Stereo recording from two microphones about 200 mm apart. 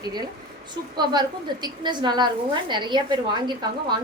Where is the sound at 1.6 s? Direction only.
20° right (ahead or behind).